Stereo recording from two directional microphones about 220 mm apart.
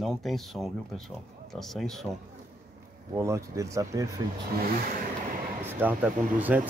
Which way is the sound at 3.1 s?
15° right (ahead or behind).